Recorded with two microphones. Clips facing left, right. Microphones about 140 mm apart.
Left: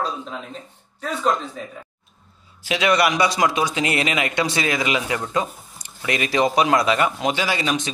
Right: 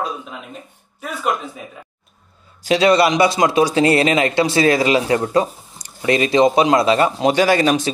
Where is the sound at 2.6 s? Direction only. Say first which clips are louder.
Right 5 dB; 35° right (ahead or behind).